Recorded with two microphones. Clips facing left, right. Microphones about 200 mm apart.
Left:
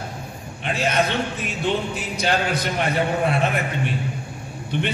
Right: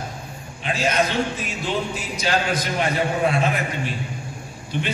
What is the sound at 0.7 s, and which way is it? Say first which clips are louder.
A man's voice: even; 60° left (ahead or behind).